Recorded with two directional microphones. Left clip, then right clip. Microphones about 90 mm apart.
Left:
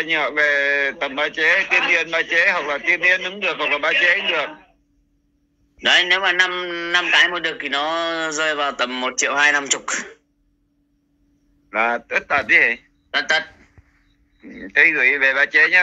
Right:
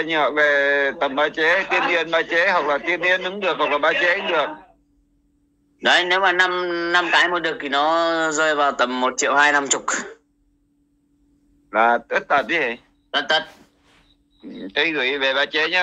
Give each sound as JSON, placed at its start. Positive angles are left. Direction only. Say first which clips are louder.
{"t": 0.0, "sound": "a man's voice", "louder": "even", "side_deg": -35}
{"t": 5.8, "sound": "a man's voice", "louder": "left 1 dB", "side_deg": -35}
{"t": 11.7, "sound": "a man's voice", "louder": "right 2 dB", "side_deg": -35}